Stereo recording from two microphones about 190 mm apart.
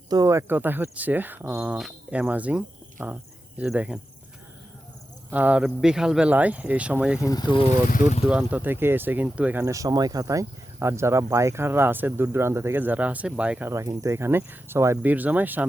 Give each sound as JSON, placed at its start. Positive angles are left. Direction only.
{"t": 0.1, "sound": "speech", "side_deg": -15}
{"t": 5.3, "sound": "speech", "side_deg": -10}
{"t": 7.3, "sound": "speech", "side_deg": 20}
{"t": 7.9, "sound": "speech", "side_deg": 45}
{"t": 8.3, "sound": "speech", "side_deg": -5}